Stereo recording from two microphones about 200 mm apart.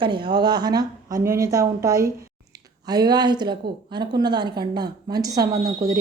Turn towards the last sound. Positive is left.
turn(degrees=-15)  # may be behind; listen again after turning